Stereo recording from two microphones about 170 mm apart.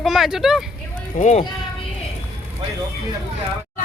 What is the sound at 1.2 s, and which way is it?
Speech, 40° left (ahead or behind).